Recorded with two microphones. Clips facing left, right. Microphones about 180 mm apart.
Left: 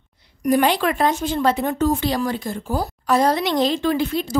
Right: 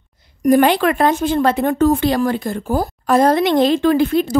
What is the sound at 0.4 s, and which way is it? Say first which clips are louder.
A woman's voice: right 5 dB; 50° right (ahead or behind).